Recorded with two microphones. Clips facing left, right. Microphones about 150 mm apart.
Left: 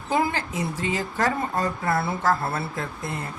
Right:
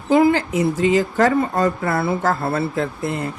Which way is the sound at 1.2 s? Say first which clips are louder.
Right 5 dB; 90° right.